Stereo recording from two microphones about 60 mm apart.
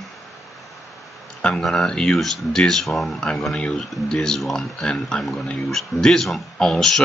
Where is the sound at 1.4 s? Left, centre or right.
Centre.